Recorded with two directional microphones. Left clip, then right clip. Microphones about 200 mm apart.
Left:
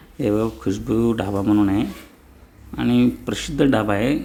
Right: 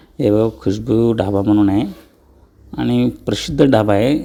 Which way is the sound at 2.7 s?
25° right (ahead or behind).